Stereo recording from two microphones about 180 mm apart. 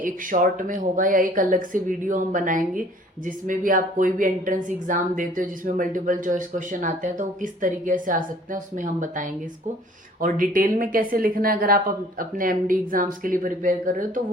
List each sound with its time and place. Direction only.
0.0 s a woman's voice: 50° right (ahead or behind)